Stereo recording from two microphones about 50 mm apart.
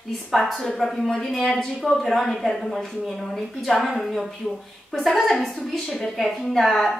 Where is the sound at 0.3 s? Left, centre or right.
Centre.